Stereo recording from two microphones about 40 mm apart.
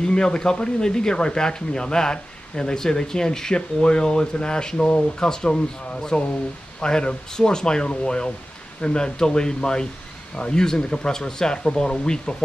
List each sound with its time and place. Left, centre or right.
0.0 s speech: left